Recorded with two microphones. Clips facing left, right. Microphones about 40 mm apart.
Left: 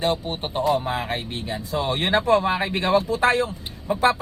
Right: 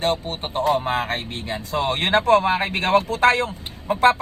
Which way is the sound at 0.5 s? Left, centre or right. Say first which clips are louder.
Right 2 dB; right.